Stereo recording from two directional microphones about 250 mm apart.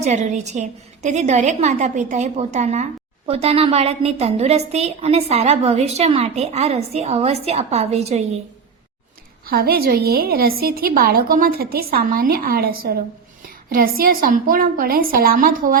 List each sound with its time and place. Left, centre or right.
0.0 s a woman's voice: right
9.5 s a woman's voice: right